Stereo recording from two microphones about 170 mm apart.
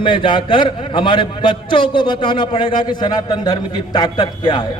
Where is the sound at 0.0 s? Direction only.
30° left (ahead or behind).